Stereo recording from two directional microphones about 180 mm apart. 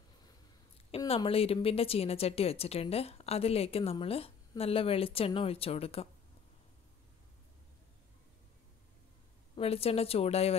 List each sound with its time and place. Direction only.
0.9 s a woman's voice: 30° left (ahead or behind)
9.6 s a woman's voice: 35° left (ahead or behind)